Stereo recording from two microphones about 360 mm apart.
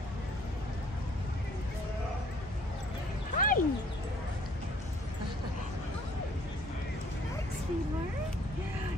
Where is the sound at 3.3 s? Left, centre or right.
Left.